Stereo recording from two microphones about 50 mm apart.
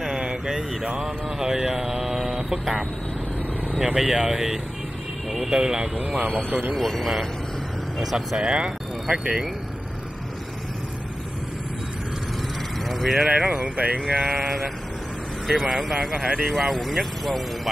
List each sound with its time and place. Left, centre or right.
0.0 s a sound: centre
0.3 s speech: centre
3.6 s speech: centre
5.3 s vehicle: centre
5.6 s speech: centre
5.9 s speech: right
6.7 s speech: centre
8.4 s speech: centre
12.8 s speech: centre
13.4 s speech: right
14.3 s speech: centre
15.9 s speech: centre